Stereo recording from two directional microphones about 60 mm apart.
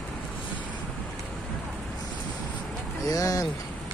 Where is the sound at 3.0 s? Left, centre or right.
Left.